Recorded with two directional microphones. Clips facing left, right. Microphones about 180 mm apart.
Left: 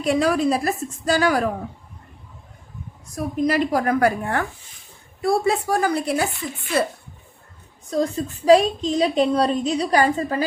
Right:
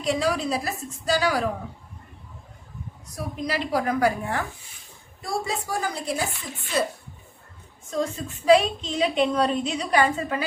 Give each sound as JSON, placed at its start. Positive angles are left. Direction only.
{"t": 0.0, "sound": "a woman's voice", "side_deg": 55}
{"t": 3.2, "sound": "a woman's voice", "side_deg": 50}
{"t": 7.9, "sound": "a woman's voice", "side_deg": 35}